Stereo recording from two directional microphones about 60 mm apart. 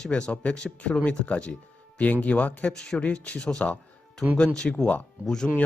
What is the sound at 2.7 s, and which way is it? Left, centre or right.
Speech, centre.